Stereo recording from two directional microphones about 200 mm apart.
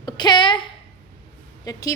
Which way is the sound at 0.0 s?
20° left (ahead or behind).